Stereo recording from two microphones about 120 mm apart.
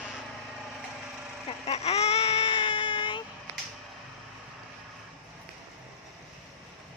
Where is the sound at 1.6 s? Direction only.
60° left (ahead or behind).